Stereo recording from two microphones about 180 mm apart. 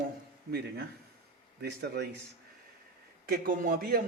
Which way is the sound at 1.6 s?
65° right (ahead or behind).